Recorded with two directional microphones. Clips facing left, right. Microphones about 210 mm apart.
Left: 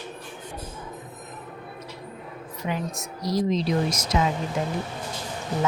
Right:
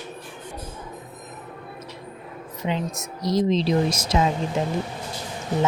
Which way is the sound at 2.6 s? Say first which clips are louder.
Right 3 dB; 20° right (ahead or behind).